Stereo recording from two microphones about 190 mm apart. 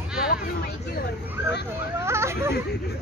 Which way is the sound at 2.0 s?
15° right (ahead or behind).